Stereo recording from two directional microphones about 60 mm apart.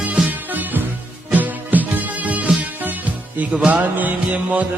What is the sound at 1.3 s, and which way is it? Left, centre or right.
Music, right.